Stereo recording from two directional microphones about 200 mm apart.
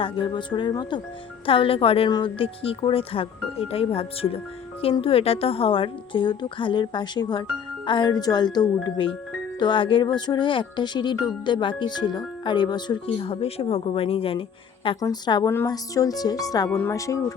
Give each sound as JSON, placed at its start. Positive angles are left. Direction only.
{"t": 0.0, "sound": "speech", "side_deg": 25}